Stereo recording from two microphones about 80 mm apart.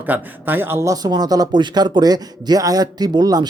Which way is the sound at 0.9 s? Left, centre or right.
Right.